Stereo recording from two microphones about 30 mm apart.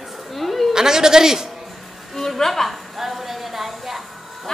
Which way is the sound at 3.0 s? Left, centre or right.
Centre.